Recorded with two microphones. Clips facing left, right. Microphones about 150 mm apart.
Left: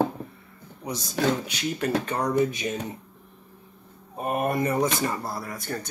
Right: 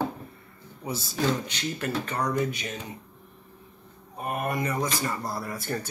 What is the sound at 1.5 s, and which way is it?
Speech, 15° left (ahead or behind).